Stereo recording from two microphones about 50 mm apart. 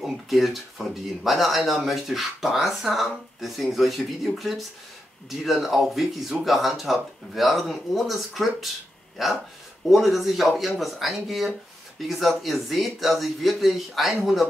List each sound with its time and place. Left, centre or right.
0.0 s speech: centre